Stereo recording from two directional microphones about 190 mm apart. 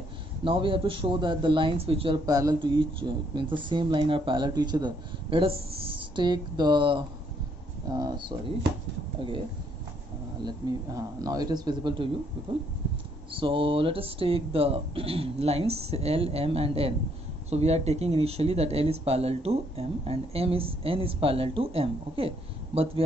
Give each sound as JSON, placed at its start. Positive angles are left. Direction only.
{"t": 0.4, "sound": "speech", "side_deg": -25}
{"t": 10.4, "sound": "speech", "side_deg": -20}
{"t": 13.3, "sound": "speech", "side_deg": -25}